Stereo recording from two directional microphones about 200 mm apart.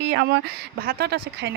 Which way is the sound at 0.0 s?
60° right (ahead or behind).